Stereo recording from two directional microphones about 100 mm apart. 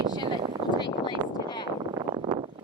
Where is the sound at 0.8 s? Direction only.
50° left (ahead or behind).